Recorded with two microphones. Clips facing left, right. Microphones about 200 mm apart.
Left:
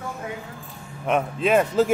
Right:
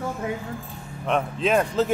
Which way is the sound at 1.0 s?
5° left (ahead or behind).